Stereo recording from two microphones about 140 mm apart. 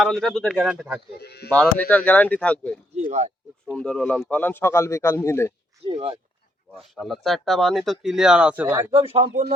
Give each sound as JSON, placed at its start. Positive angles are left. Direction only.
{"t": 0.0, "sound": "speech", "side_deg": 0}
{"t": 1.5, "sound": "speech", "side_deg": 10}
{"t": 3.1, "sound": "speech", "side_deg": -55}
{"t": 3.8, "sound": "speech", "side_deg": 5}
{"t": 5.8, "sound": "speech", "side_deg": -40}
{"t": 6.7, "sound": "speech", "side_deg": 0}
{"t": 8.9, "sound": "speech", "side_deg": -40}